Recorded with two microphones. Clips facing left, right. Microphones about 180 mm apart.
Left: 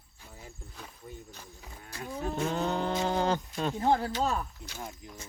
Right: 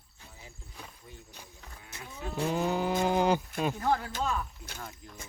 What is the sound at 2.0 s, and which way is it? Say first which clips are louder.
Speech: left 6 dB; 45° left (ahead or behind).